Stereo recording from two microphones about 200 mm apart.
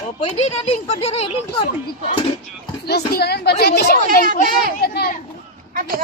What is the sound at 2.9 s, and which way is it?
A woman's voice, 55° left (ahead or behind).